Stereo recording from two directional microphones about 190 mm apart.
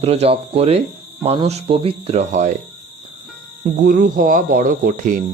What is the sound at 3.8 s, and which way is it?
Speech, 50° right (ahead or behind).